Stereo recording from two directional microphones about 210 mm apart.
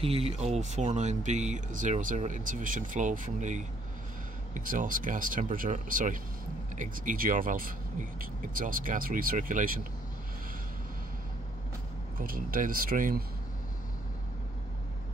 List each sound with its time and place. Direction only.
0.0 s speech: 30° right (ahead or behind)
12.2 s speech: 40° right (ahead or behind)